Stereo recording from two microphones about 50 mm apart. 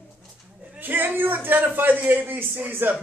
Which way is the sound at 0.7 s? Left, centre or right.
Right.